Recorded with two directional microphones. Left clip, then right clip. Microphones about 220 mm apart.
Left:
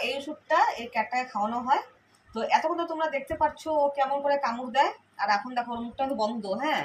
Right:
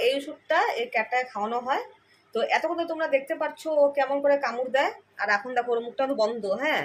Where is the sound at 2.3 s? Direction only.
40° right (ahead or behind).